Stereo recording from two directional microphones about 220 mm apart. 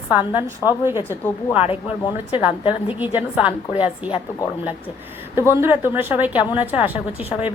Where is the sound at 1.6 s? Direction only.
25° left (ahead or behind).